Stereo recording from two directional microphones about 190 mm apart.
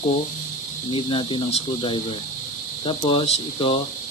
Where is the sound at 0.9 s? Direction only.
25° left (ahead or behind).